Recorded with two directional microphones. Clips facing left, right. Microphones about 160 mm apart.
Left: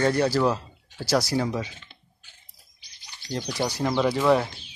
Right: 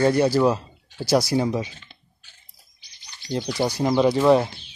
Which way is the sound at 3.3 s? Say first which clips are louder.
Right 4 dB; 10° right (ahead or behind).